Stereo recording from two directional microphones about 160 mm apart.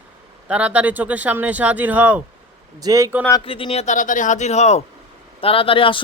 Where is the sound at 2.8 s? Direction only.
20° right (ahead or behind).